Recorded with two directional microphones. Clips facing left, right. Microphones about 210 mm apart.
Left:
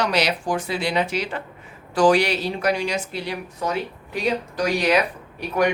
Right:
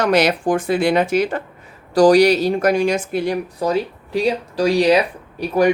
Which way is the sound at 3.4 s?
35° right (ahead or behind).